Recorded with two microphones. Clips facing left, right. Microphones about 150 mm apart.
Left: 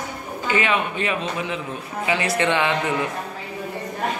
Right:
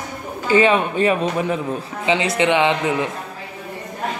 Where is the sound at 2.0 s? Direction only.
20° right (ahead or behind).